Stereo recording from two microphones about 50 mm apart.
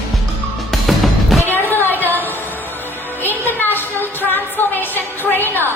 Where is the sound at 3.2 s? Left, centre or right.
Left.